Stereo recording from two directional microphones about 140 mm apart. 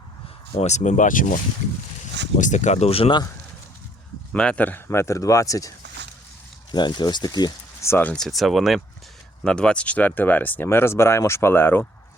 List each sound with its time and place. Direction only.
0.5 s speech: 50° left (ahead or behind); by 1.4 s 70° left (ahead or behind)
2.4 s speech: 60° left (ahead or behind); by 3.2 s 40° left (ahead or behind)
4.3 s speech: 5° left (ahead or behind)